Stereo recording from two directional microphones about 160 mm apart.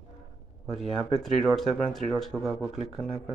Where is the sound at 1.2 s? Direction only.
Centre (ahead or behind).